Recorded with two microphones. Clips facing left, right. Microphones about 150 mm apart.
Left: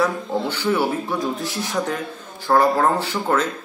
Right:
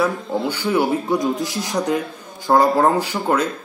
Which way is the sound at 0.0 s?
10° right (ahead or behind).